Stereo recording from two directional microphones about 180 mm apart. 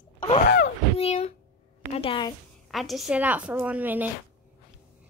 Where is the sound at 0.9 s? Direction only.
35° left (ahead or behind).